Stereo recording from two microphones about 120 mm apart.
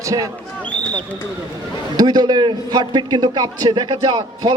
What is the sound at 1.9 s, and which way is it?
A man's voice, 35° right (ahead or behind).